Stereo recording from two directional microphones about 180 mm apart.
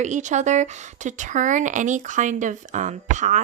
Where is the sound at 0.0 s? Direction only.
40° right (ahead or behind).